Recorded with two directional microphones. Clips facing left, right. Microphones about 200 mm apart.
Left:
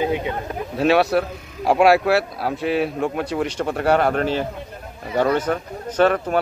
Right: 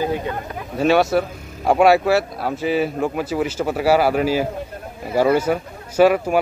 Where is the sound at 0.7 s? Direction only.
Centre (ahead or behind).